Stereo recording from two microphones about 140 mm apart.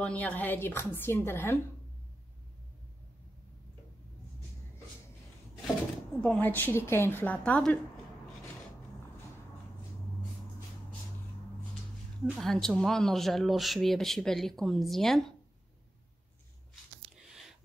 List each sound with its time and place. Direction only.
0.0 s a woman's voice: 10° left (ahead or behind)
6.2 s a woman's voice: 10° left (ahead or behind)
12.3 s speech: centre (ahead or behind)
17.1 s a sound: 5° right (ahead or behind)